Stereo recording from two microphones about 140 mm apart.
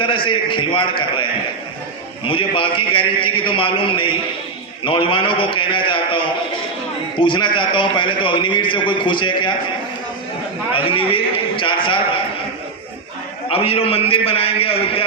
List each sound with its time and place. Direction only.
0.0 s a man's voice: 35° left (ahead or behind)
10.7 s a man's voice: 40° left (ahead or behind)
11.3 s a sound: 35° left (ahead or behind)
13.5 s a man's voice: 40° left (ahead or behind)